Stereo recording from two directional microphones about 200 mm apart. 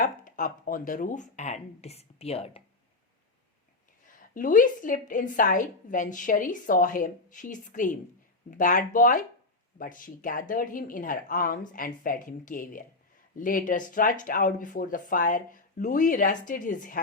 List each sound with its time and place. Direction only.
0.0 s a woman's voice: 40° left (ahead or behind)
4.0 s a woman's voice: 40° left (ahead or behind)